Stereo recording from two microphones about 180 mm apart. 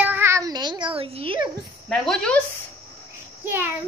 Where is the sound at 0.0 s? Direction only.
10° right (ahead or behind); by 1.5 s 30° right (ahead or behind).